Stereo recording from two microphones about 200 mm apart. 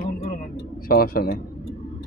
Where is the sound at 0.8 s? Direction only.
50° left (ahead or behind).